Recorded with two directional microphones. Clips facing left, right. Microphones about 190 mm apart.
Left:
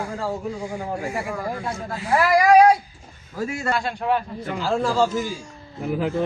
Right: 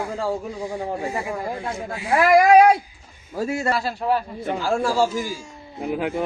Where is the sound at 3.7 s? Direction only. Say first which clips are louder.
Even; 5° right (ahead or behind).